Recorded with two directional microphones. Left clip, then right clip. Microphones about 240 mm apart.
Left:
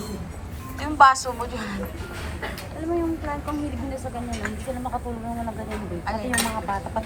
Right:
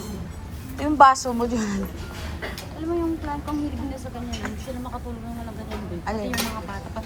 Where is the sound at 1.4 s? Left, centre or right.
Right.